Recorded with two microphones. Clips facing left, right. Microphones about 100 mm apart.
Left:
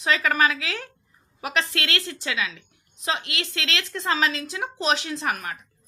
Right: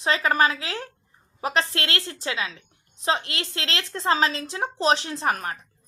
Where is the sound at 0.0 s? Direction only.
30° right (ahead or behind).